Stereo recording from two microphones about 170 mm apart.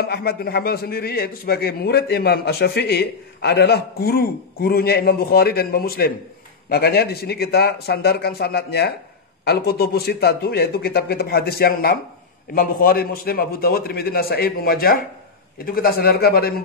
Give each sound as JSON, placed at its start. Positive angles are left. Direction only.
{"t": 0.0, "sound": "a man's voice", "side_deg": 65}